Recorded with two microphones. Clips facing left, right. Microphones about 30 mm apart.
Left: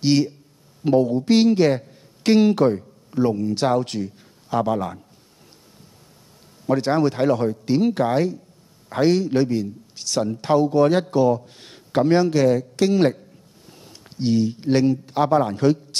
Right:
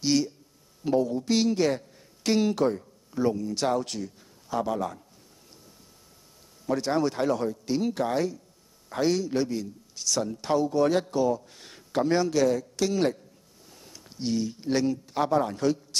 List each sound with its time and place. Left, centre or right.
0.0 s a man's voice: left
6.6 s a man's voice: left